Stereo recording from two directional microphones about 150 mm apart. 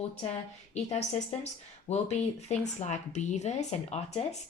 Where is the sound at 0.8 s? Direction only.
45° left (ahead or behind).